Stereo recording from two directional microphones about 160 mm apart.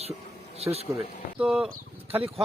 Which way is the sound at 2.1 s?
35° right (ahead or behind).